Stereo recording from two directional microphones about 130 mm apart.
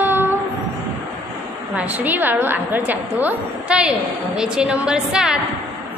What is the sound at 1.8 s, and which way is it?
A woman's voice, 10° right (ahead or behind).